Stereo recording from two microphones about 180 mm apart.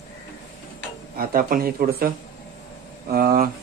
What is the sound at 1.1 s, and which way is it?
Speech, 55° right (ahead or behind).